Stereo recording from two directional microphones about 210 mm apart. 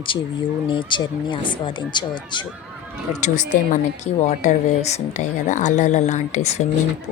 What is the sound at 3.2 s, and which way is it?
Speech, 35° left (ahead or behind).